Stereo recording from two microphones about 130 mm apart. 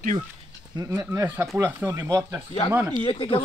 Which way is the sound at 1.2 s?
15° right (ahead or behind).